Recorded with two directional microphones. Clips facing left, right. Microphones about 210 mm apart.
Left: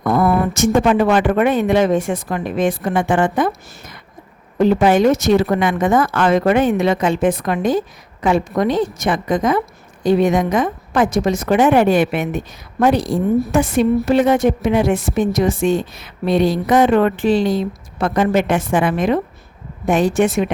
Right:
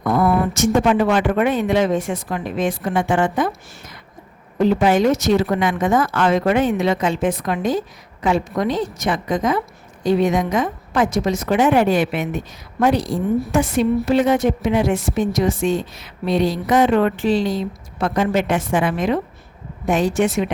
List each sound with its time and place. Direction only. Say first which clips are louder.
0.0 s a woman's voice: left 2 dB; 55° left (ahead or behind)
4.6 s a woman's voice: left 3 dB; 55° left (ahead or behind)